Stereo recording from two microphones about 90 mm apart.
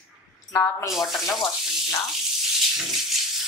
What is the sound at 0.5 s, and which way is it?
Speech, 30° left (ahead or behind).